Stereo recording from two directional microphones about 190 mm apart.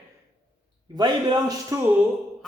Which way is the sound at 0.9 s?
20° right (ahead or behind).